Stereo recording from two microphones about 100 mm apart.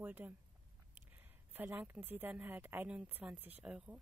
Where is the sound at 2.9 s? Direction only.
10° right (ahead or behind).